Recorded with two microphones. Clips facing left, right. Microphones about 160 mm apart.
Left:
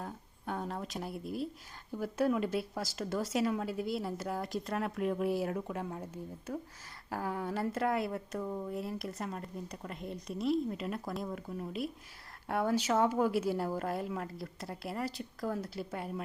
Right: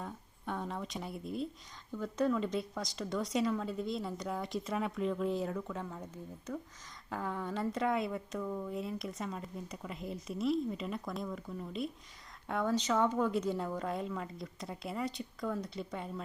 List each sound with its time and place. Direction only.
0.0 s speech: 5° left (ahead or behind)
7.1 s speech: 5° left (ahead or behind)
8.4 s speech: 20° left (ahead or behind)
8.7 s speech: centre (ahead or behind)
11.4 s speech: 15° left (ahead or behind)